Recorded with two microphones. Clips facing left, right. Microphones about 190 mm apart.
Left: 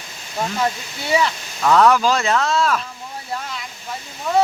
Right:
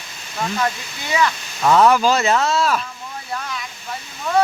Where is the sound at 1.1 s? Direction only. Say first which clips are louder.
Left 1 dB; 30° left (ahead or behind).